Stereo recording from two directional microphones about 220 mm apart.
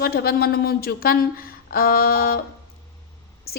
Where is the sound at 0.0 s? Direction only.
45° left (ahead or behind).